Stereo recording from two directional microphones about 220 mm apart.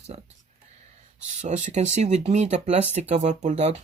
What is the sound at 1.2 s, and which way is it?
Speech, 30° right (ahead or behind).